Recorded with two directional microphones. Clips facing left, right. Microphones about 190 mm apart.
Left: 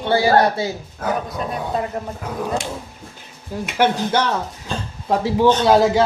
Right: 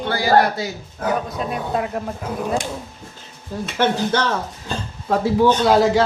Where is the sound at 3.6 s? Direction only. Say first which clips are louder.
Left 1 dB; 15° left (ahead or behind).